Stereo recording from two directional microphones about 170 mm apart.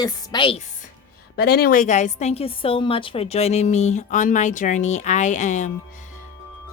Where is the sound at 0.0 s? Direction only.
25° left (ahead or behind).